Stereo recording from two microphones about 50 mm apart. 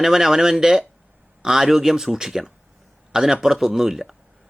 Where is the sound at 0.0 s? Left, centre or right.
Centre.